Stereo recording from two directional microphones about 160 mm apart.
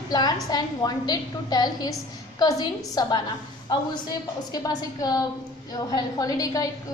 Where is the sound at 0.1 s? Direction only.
25° left (ahead or behind).